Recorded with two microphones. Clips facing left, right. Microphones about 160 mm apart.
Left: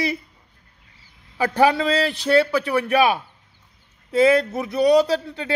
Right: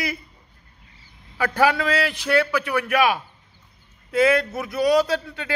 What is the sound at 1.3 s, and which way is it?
Speech, 25° left (ahead or behind).